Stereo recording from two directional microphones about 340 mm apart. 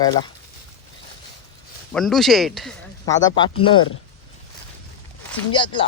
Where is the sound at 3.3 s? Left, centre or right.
Centre.